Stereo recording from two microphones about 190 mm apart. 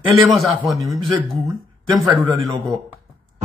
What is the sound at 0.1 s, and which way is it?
Speech, centre (ahead or behind).